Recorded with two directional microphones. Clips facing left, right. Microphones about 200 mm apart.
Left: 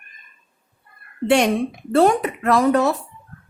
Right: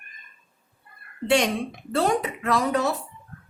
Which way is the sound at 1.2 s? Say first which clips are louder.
Left 5 dB; 60° left (ahead or behind).